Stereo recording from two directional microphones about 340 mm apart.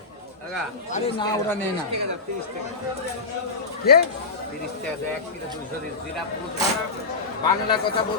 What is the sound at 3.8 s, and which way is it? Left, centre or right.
Speech, left.